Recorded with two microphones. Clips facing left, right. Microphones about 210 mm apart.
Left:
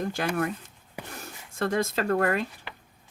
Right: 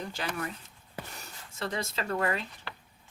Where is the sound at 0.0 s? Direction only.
50° left (ahead or behind).